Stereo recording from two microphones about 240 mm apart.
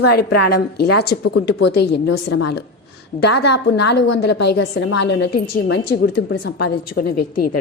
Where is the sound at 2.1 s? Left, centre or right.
Left.